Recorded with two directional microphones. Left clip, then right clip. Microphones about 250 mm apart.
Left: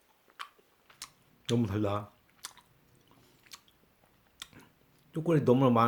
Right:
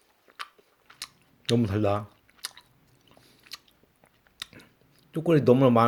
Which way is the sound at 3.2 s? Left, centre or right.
Centre.